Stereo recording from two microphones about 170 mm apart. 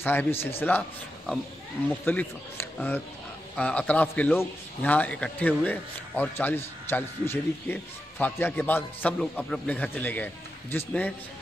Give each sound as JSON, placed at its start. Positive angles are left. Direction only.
{"t": 0.0, "sound": "a man's voice", "side_deg": 10}